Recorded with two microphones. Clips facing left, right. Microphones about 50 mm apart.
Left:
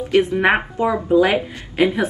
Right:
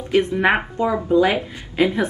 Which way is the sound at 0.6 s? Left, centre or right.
Centre.